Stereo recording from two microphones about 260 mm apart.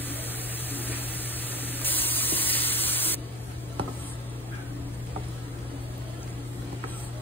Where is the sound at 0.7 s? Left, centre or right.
Centre.